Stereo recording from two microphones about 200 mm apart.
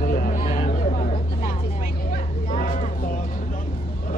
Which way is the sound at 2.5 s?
40° left (ahead or behind).